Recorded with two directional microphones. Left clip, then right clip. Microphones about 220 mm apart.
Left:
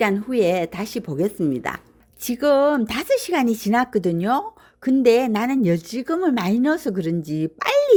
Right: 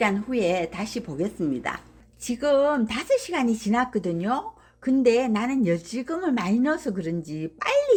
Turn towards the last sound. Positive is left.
turn(degrees=40)  # may be behind; listen again after turning